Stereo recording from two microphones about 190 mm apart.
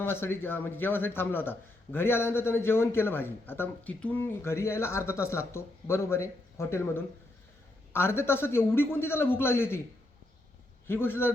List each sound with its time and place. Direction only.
0.0 s speech: 10° left (ahead or behind)
10.8 s speech: 10° left (ahead or behind)